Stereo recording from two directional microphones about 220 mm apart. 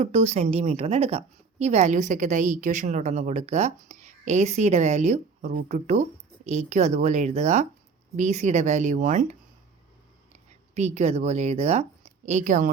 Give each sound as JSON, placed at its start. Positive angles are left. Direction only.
{"t": 0.0, "sound": "a woman's voice", "side_deg": -30}
{"t": 10.8, "sound": "a woman's voice", "side_deg": -30}